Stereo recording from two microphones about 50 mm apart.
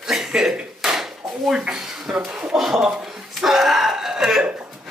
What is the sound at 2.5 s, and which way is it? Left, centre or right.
Throat clearing, centre.